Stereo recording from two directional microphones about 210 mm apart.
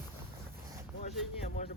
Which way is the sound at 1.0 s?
35° left (ahead or behind).